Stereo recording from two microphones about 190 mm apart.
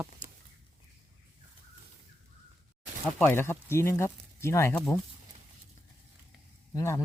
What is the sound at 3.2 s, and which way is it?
Speech, 10° left (ahead or behind).